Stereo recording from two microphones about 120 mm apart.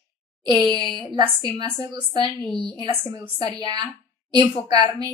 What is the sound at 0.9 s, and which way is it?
A woman's voice, 40° right (ahead or behind).